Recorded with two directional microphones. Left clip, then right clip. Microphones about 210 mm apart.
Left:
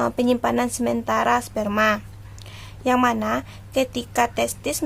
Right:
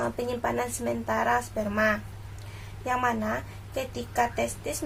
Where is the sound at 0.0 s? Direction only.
40° left (ahead or behind).